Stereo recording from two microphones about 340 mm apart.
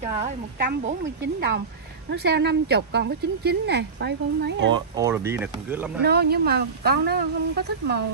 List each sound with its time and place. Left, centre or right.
0.6 s a woman's voice: right
4.7 s speech: centre
6.0 s speech: right